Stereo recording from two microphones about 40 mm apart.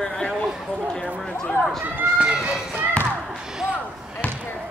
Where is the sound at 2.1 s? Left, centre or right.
Right.